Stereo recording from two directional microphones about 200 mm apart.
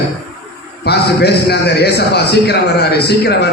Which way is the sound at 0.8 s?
55° left (ahead or behind).